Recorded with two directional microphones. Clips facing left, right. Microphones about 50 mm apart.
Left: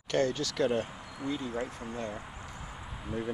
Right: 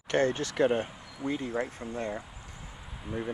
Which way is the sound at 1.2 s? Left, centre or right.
Right.